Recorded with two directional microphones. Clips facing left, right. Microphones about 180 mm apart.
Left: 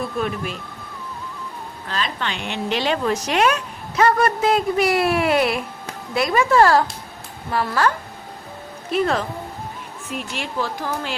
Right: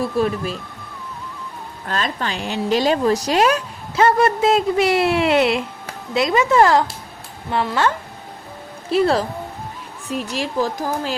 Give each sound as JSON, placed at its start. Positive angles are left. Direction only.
{"t": 0.2, "sound": "a woman's voice", "side_deg": -35}
{"t": 1.9, "sound": "a woman's voice", "side_deg": -45}
{"t": 8.9, "sound": "a woman's voice", "side_deg": -30}